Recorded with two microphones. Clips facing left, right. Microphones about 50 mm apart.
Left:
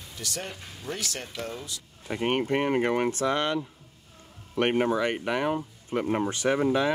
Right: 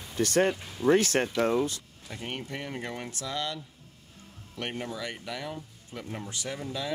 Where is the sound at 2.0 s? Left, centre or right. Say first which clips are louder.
Left 12 dB; left.